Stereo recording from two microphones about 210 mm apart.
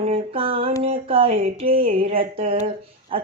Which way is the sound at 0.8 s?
25° right (ahead or behind).